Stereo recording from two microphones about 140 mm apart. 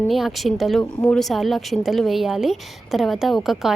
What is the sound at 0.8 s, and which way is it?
Speech, 15° left (ahead or behind).